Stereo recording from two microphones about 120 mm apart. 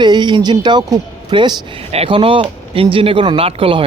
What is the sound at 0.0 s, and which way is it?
Speech, 40° right (ahead or behind).